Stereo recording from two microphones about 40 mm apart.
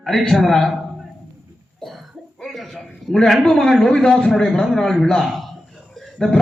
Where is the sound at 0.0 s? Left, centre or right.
Centre.